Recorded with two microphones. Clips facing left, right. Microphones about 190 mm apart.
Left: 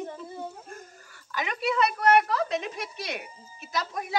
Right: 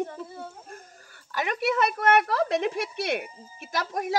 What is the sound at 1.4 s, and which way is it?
A woman's voice, 50° right (ahead or behind).